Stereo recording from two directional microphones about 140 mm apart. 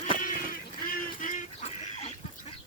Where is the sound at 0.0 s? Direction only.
75° left (ahead or behind).